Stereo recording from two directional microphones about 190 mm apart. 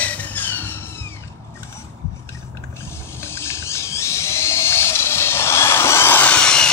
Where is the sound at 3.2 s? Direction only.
15° left (ahead or behind).